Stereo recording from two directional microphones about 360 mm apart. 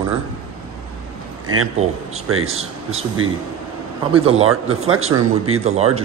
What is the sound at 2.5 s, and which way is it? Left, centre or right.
Speech, centre.